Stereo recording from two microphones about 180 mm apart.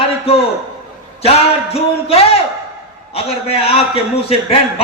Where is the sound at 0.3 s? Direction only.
35° left (ahead or behind).